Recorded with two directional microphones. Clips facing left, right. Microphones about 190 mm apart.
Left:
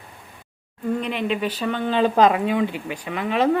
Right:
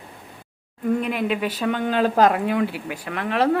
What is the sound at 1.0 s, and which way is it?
A woman's voice, 5° right (ahead or behind).